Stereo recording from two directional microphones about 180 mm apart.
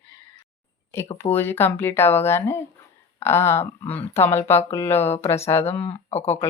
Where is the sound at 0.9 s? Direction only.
15° left (ahead or behind).